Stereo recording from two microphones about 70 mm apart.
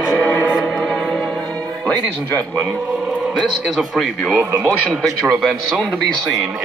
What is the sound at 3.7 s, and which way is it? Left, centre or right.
A man's voice, centre.